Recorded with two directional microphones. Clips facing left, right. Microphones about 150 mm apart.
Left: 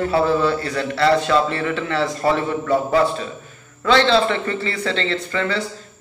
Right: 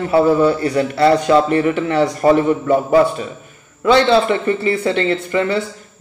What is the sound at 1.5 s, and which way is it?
A man's voice, 30° right (ahead or behind).